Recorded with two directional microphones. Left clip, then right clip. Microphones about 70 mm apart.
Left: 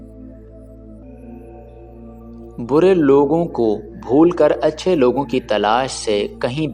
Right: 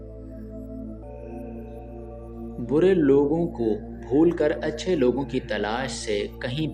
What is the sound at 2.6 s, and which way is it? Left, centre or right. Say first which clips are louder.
Speech: left 6 dB; left.